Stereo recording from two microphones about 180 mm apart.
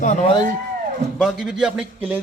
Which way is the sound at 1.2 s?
Centre (ahead or behind).